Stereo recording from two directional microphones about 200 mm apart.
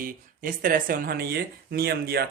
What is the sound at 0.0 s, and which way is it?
Speech, 45° right (ahead or behind).